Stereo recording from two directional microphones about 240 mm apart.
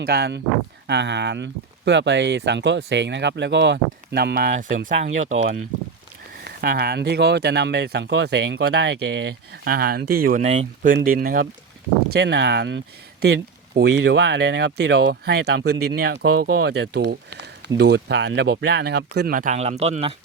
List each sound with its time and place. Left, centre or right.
0.0 s speech: right